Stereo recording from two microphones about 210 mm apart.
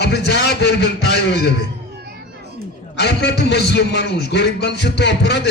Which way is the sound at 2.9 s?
55° left (ahead or behind).